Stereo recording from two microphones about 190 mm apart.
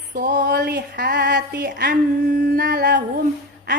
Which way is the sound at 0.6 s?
60° right (ahead or behind).